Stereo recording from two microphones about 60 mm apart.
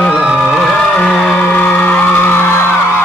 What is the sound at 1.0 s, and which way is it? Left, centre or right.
Music, centre.